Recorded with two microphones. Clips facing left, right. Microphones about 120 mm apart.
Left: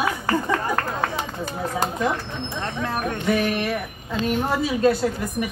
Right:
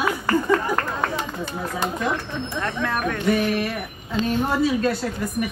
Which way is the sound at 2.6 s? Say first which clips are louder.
Right 1 dB; 30° left (ahead or behind).